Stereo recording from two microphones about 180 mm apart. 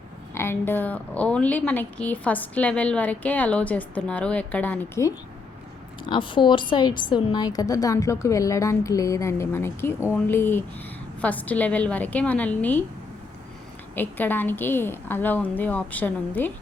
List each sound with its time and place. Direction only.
0.3 s a woman's voice: 15° left (ahead or behind)
6.1 s a woman's voice: 30° left (ahead or behind); by 12.8 s 10° left (ahead or behind)
13.9 s a woman's voice: 10° left (ahead or behind)